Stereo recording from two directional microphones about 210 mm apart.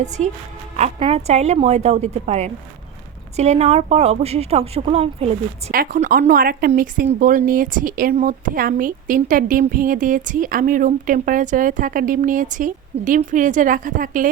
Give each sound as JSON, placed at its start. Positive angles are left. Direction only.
{"t": 0.2, "sound": "speech", "side_deg": -30}
{"t": 5.7, "sound": "speech", "side_deg": -40}